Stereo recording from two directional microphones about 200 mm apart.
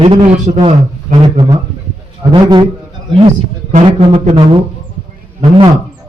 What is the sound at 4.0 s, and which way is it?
Speech, 30° right (ahead or behind).